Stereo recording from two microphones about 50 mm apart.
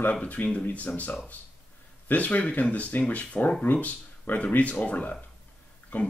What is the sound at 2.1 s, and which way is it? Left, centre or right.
Speech, left.